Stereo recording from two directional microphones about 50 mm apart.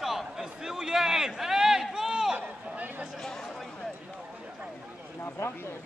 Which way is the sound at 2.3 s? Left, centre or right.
Right.